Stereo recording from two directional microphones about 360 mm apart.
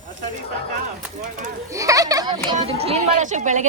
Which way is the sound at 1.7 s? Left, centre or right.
Centre.